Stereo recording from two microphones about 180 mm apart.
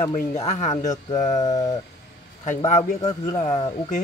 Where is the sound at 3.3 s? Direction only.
25° left (ahead or behind).